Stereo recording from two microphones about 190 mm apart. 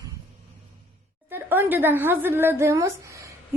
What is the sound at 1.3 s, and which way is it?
A woman's voice, 10° right (ahead or behind).